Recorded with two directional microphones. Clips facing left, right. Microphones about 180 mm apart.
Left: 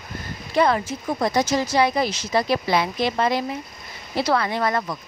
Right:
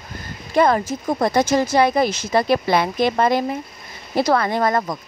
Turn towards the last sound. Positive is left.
turn(degrees=-45)  # may be behind; listen again after turning